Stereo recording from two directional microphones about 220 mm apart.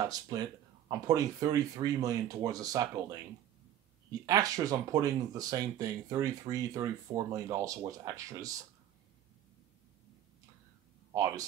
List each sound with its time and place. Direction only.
0.0 s speech: 15° right (ahead or behind)
4.3 s speech: 15° right (ahead or behind)
11.1 s speech: 15° right (ahead or behind)